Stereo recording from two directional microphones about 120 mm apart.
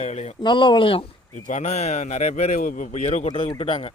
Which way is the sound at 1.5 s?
75° left (ahead or behind).